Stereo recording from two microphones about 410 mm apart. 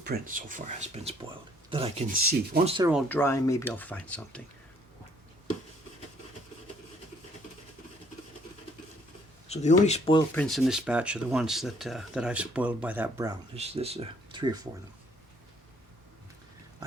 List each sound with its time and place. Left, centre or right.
0.0 s speech: right
3.1 s speech: centre
9.5 s speech: centre